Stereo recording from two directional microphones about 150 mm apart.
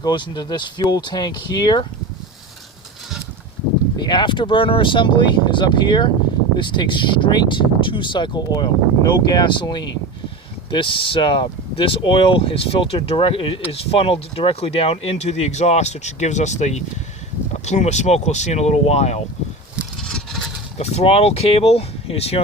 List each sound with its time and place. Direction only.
0.0 s speech: 30° left (ahead or behind)
3.9 s speech: 30° left (ahead or behind); by 19.2 s 45° left (ahead or behind)
20.0 s vehicle: 5° left (ahead or behind)
20.7 s speech: 45° left (ahead or behind)